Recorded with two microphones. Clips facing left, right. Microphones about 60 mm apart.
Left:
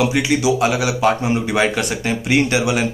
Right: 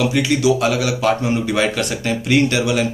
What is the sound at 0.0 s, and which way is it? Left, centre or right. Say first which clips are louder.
Speech: even; centre.